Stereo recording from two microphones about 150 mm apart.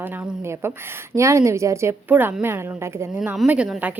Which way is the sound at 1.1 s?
20° right (ahead or behind).